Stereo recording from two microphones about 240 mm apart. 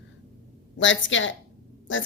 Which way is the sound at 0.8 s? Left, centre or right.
Left.